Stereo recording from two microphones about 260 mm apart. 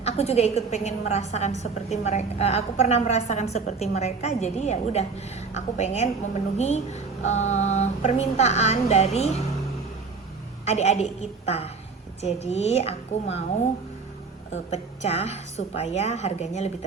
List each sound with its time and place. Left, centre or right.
0.0 s a woman's voice: left
10.7 s a woman's voice: left
14.7 s a woman's voice: left